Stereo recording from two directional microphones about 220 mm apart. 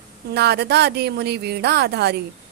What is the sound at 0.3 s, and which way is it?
Speech, 50° right (ahead or behind).